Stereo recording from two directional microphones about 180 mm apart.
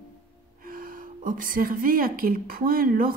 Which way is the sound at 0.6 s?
50° right (ahead or behind).